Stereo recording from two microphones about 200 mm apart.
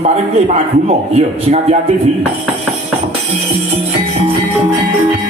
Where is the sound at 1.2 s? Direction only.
30° right (ahead or behind).